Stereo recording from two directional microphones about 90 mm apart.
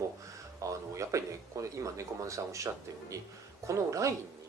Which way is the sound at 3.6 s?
35° right (ahead or behind).